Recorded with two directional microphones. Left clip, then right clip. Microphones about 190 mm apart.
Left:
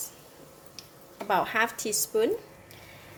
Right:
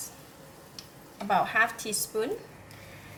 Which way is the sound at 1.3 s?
45° left (ahead or behind).